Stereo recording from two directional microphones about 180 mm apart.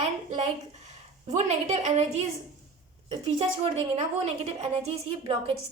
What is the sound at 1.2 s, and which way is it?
Speech, 40° right (ahead or behind).